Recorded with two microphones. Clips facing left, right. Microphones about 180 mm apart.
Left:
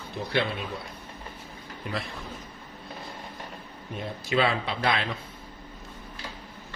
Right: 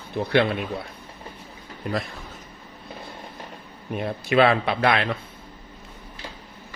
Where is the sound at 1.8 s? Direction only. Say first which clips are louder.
Right 6 dB; 40° right (ahead or behind).